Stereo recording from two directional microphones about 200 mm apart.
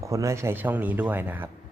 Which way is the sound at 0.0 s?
15° right (ahead or behind).